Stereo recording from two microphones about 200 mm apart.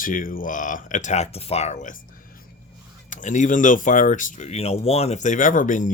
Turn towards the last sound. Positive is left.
turn(degrees=40)  # may be behind; listen again after turning